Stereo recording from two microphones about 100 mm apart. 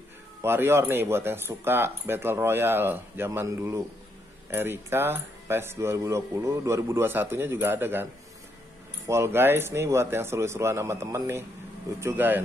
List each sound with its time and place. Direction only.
0.4 s speech: 25° right (ahead or behind)